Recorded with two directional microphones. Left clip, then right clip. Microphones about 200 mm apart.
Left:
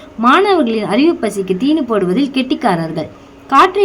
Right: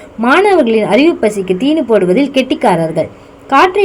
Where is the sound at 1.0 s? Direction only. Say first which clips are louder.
Right 3 dB; 30° left (ahead or behind).